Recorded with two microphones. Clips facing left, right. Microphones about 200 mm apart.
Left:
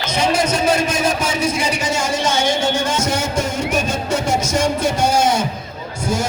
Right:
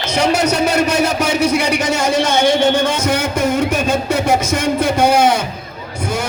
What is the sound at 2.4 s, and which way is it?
Music, 60° right (ahead or behind).